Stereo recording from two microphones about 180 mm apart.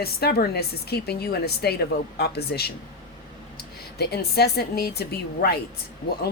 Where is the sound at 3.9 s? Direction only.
60° left (ahead or behind).